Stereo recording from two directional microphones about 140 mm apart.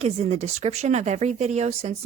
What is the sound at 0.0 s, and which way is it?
Speech, 50° right (ahead or behind).